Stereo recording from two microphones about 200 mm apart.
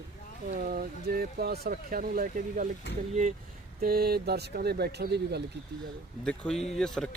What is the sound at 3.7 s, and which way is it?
Speech, 50° right (ahead or behind).